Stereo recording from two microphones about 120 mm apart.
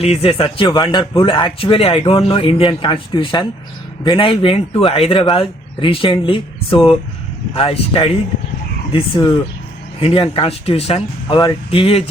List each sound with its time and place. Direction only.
0.0 s a man's voice: 55° left (ahead or behind)